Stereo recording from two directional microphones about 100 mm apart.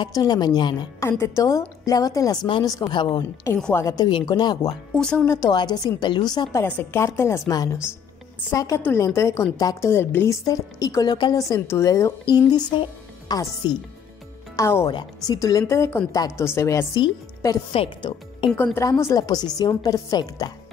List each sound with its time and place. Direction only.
0.1 s a woman's voice: 45° left (ahead or behind)
0.9 s a woman's voice: 30° left (ahead or behind)
2.8 s a woman's voice: 50° left (ahead or behind)
4.9 s speech: 10° left (ahead or behind)
5.2 s a woman's voice: 25° left (ahead or behind)
5.5 s a woman's voice: 45° left (ahead or behind)
6.5 s a woman's voice: 25° left (ahead or behind); by 11.3 s 45° left (ahead or behind)
11.3 s a woman's voice: 35° left (ahead or behind)
12.3 s a woman's voice: 45° left (ahead or behind)
14.6 s a woman's voice: 25° left (ahead or behind)
14.9 s a woman's voice: 50° left (ahead or behind)
15.3 s a woman's voice: 35° left (ahead or behind)
17.7 s a woman's voice: 55° left (ahead or behind)
18.8 s a woman's voice: 30° left (ahead or behind)